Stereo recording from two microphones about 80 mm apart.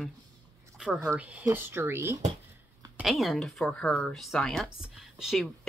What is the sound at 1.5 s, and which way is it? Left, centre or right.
Speech, right.